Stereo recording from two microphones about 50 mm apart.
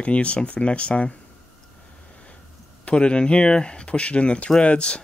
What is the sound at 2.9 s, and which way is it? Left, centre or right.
Speech, left.